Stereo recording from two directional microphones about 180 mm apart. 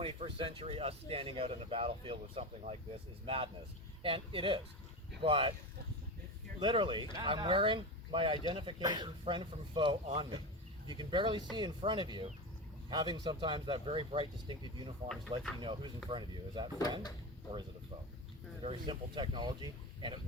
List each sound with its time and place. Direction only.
0.0 s speech: 30° right (ahead or behind)
6.6 s speech: 25° right (ahead or behind)
18.6 s speech: 30° right (ahead or behind)